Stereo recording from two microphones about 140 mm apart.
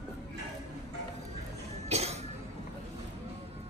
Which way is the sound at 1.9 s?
50° right (ahead or behind).